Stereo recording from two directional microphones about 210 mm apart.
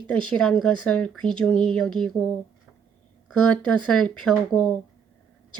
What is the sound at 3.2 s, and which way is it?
A woman's voice, 5° left (ahead or behind).